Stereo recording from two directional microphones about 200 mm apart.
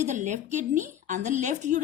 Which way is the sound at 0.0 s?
35° right (ahead or behind).